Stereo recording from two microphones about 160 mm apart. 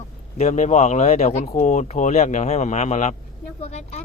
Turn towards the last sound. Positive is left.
turn(degrees=40)  # may be behind; listen again after turning